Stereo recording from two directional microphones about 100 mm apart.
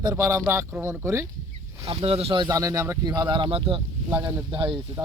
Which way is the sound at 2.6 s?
35° right (ahead or behind).